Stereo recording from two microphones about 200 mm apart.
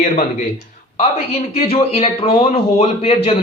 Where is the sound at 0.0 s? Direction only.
35° left (ahead or behind).